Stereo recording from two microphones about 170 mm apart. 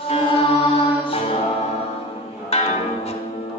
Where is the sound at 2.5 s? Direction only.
35° left (ahead or behind).